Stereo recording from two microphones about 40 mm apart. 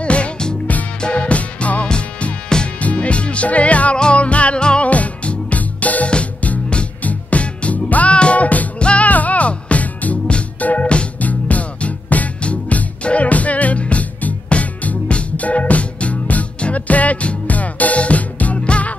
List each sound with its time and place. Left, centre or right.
0.0 s music: left
1.9 s music: left
4.8 s music: left